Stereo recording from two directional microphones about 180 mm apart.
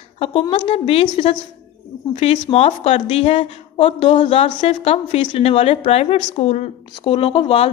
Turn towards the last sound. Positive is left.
turn(degrees=30)  # may be behind; listen again after turning